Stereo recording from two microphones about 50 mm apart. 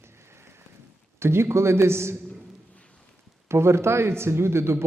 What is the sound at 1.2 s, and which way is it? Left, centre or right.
Speech, right.